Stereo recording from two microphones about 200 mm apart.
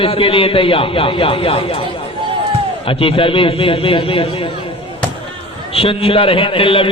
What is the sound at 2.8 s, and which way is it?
A man's voice, 25° left (ahead or behind).